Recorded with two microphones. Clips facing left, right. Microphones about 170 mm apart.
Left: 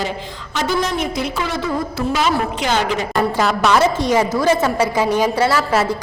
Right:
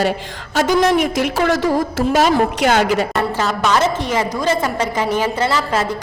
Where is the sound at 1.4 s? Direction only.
90° right.